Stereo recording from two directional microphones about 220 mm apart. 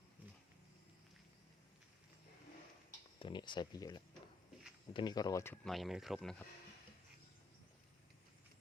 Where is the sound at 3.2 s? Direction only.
20° left (ahead or behind); by 6.4 s centre (ahead or behind).